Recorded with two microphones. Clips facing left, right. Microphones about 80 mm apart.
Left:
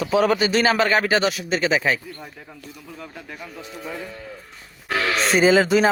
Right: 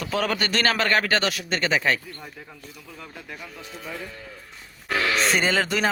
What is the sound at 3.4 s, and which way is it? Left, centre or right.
Speech, left.